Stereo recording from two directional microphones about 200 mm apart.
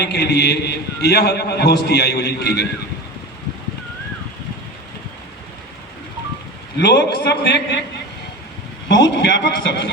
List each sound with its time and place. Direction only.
0.0 s a man's voice: 55° left (ahead or behind)
6.7 s a man's voice: 60° left (ahead or behind)
8.9 s a man's voice: 65° left (ahead or behind)